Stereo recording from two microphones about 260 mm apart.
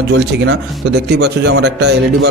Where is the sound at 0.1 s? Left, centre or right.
Right.